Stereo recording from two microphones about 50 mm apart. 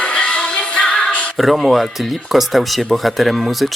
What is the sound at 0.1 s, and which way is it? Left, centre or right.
Music, left.